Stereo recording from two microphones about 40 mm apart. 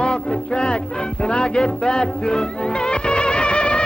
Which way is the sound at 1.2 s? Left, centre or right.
Left.